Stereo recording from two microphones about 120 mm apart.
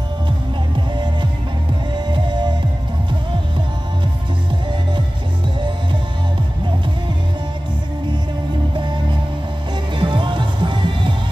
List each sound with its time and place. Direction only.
0.7 s music: 40° right (ahead or behind)
8.7 s music: 40° right (ahead or behind)